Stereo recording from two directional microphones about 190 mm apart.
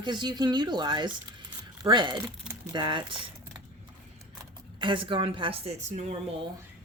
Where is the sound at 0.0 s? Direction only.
25° right (ahead or behind).